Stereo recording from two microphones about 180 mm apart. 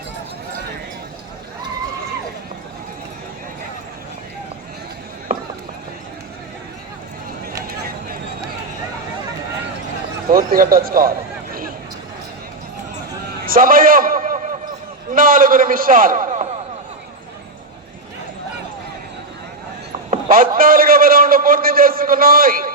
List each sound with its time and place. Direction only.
5.3 s mechanisms: 50° right (ahead or behind)
10.2 s a man's voice: 50° right (ahead or behind)
13.4 s a sound: 50° right (ahead or behind)
15.1 s a man's voice: 50° right (ahead or behind)
20.3 s a man's voice: 50° right (ahead or behind)